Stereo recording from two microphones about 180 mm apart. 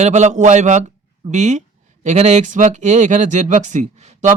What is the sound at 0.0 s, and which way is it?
A man's voice, 40° right (ahead or behind).